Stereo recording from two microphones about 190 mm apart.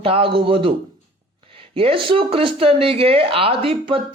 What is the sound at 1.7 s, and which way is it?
A man's voice, 30° right (ahead or behind).